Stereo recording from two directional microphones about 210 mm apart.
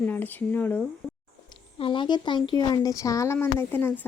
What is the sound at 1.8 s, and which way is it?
Speech, 20° left (ahead or behind).